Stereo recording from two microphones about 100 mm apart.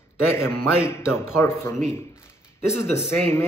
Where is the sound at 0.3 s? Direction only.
25° left (ahead or behind).